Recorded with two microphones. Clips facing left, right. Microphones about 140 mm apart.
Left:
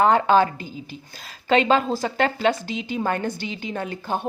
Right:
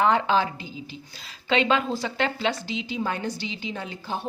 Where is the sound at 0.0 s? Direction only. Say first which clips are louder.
Left 4 dB; 45° left (ahead or behind).